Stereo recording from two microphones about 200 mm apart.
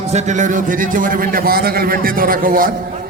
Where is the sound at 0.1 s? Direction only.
35° right (ahead or behind).